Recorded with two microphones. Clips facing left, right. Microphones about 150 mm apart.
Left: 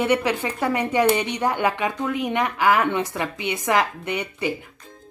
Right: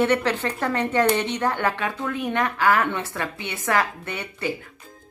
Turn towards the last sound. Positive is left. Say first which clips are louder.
# left 4 dB
turn(degrees=15)  # may be behind; listen again after turning